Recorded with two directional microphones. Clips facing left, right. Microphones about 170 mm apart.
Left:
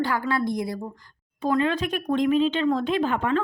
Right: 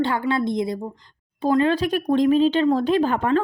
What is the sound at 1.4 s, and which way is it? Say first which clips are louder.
Speech: right 4 dB; 35° right (ahead or behind).